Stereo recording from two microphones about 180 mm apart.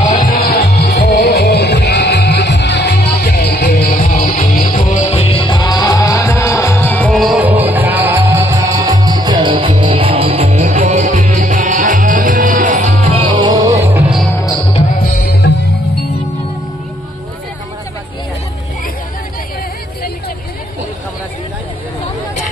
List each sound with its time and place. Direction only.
0.1 s music: 55° left (ahead or behind); by 12.9 s 45° right (ahead or behind)
13.2 s music: 25° right (ahead or behind); by 14.2 s 10° right (ahead or behind)